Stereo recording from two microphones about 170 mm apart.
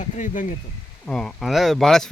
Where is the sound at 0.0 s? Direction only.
45° left (ahead or behind).